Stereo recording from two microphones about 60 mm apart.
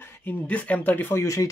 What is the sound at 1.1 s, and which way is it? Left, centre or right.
Speech, left.